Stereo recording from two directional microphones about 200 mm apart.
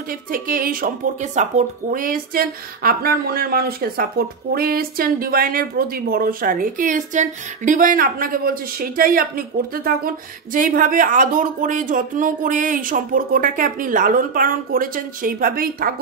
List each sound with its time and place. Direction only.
0.1 s speech: 45° right (ahead or behind)